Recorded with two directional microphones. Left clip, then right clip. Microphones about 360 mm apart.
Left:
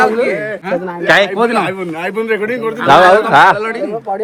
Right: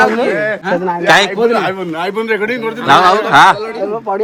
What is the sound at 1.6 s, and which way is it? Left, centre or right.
A man's voice, centre.